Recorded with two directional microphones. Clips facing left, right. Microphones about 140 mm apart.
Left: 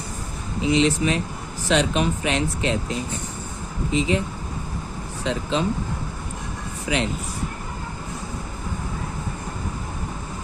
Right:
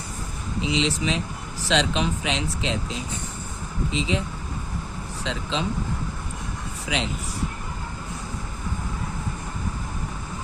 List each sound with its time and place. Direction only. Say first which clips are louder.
0.6 s speech: left 5 dB; 55° left (ahead or behind)
5.2 s speech: left 5 dB; 50° left (ahead or behind)
6.8 s speech: left 4 dB; 55° left (ahead or behind)